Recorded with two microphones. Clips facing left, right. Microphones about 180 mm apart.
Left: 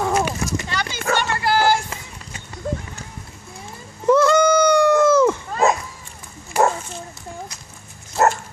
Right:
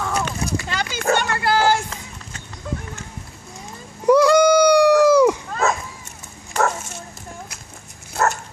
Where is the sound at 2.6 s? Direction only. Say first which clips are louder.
Left 3 dB; 40° left (ahead or behind).